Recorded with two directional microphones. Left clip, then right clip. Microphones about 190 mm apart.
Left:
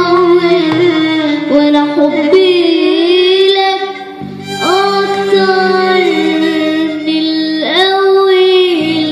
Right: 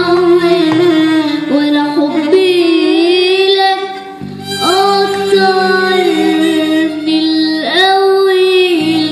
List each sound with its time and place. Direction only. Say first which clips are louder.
0.3 s music: even; 50° right (ahead or behind)
5.3 s music: even; 50° right (ahead or behind)
7.7 s child singing: even; 50° right (ahead or behind)